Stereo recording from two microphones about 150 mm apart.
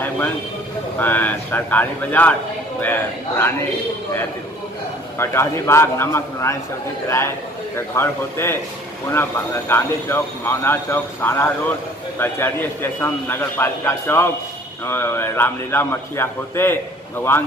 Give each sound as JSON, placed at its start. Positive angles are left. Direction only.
{"t": 0.9, "sound": "speech", "side_deg": 10}
{"t": 5.2, "sound": "speech", "side_deg": 15}